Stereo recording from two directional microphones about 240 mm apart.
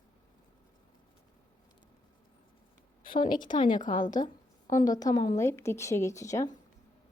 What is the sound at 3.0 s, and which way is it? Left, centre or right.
Speech, left.